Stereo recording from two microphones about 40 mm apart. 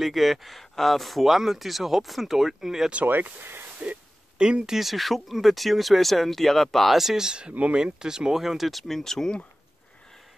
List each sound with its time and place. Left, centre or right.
0.0 s speech: centre
1.3 s speech: centre
3.1 s speech: right
3.8 s speech: right
4.4 s speech: right
4.7 s speech: centre
7.0 s speech: centre